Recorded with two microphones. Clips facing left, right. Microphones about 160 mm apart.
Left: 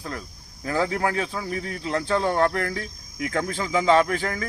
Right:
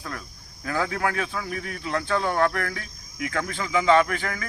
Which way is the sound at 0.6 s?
25° left (ahead or behind).